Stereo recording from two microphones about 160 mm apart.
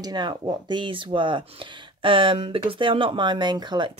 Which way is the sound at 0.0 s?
30° right (ahead or behind).